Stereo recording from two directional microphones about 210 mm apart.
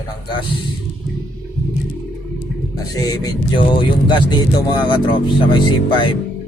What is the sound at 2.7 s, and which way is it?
Speech, 15° left (ahead or behind).